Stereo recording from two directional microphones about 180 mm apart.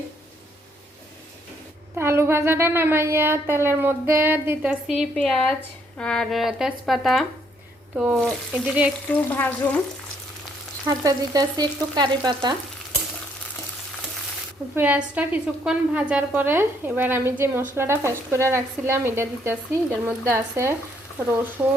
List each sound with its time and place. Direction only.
2.0 s a woman's voice: 15° right (ahead or behind)
9.0 s frying: 10° left (ahead or behind)
11.0 s frying: 20° right (ahead or behind)
14.8 s a woman's voice: 10° right (ahead or behind)